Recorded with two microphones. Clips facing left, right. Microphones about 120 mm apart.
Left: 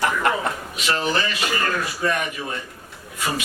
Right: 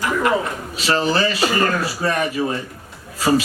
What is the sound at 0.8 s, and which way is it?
Speech, 35° right (ahead or behind).